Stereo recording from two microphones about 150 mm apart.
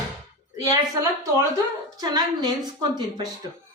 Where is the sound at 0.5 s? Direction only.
25° right (ahead or behind).